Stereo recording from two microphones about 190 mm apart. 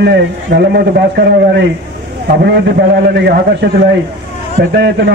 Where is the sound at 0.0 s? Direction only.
60° right (ahead or behind).